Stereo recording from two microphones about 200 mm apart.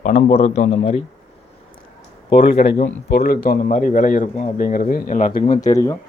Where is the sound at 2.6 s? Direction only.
45° left (ahead or behind).